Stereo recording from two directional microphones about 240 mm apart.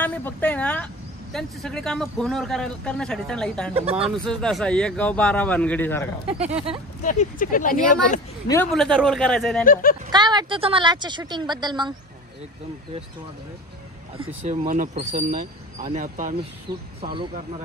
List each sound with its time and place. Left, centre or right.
0.0 s a woman's voice: centre
3.7 s speech: right
4.0 s a man's voice: centre
6.4 s speech: right
7.0 s speech: left
8.7 s a man's voice: centre
9.7 s speech: left
10.1 s a woman's voice: centre
14.1 s speech: right
17.0 s speech: right